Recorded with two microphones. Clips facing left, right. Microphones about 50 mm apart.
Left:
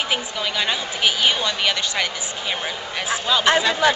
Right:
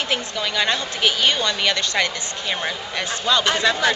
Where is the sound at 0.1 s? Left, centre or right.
Centre.